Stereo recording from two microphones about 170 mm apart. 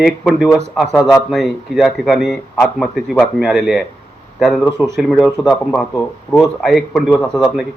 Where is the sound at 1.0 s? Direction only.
20° left (ahead or behind).